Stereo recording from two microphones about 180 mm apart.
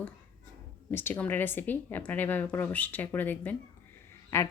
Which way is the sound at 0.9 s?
10° left (ahead or behind).